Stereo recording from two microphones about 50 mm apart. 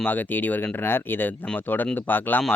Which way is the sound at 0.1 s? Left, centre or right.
Left.